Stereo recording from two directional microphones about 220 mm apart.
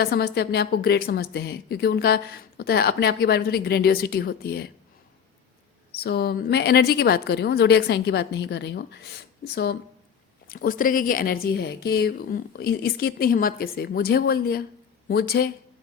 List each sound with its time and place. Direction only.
0.0 s a woman's voice: 45° left (ahead or behind)
6.0 s a woman's voice: 45° left (ahead or behind)